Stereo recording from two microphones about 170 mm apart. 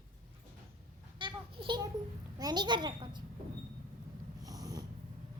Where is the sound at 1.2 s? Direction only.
30° right (ahead or behind).